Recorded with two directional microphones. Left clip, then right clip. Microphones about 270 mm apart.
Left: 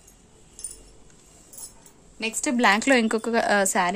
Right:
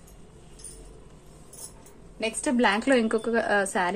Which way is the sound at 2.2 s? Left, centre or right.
Left.